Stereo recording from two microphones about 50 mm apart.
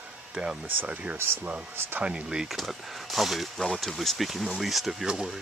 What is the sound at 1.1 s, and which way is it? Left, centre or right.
Speech, right.